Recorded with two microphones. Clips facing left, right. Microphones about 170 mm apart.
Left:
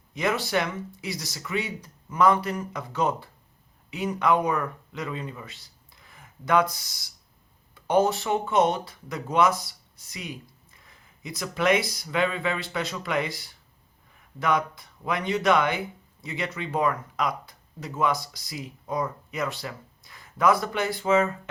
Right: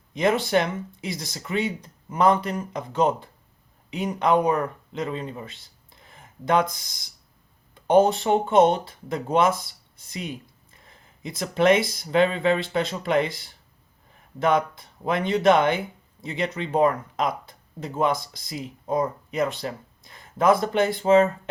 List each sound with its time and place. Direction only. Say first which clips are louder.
0.1 s speech: right 5 dB; 25° right (ahead or behind)
7.9 s speech: right 4 dB; 25° right (ahead or behind)